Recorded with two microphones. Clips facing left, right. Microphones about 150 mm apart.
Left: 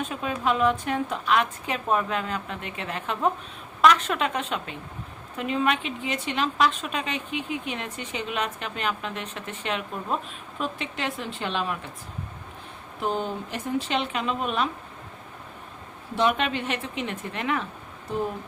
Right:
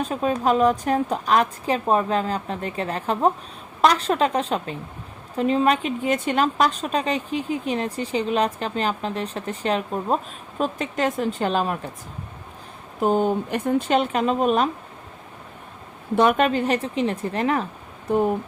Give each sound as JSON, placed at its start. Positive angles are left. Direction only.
{"t": 0.0, "sound": "a woman's voice", "side_deg": -35}
{"t": 13.0, "sound": "speech", "side_deg": -45}
{"t": 16.1, "sound": "a woman's voice", "side_deg": -45}